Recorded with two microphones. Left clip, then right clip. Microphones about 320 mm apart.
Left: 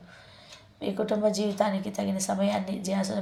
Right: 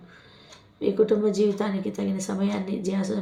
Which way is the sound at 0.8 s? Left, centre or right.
Centre.